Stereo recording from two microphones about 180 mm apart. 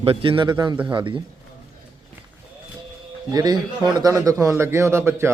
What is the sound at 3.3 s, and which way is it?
A man's voice, 20° right (ahead or behind).